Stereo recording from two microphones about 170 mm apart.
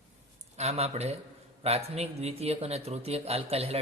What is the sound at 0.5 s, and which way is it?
A man's voice, 40° right (ahead or behind).